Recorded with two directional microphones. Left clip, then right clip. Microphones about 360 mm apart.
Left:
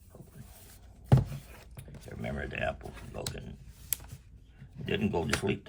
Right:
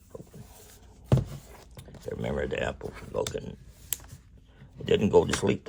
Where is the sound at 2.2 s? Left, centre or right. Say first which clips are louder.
Right 4 dB; centre.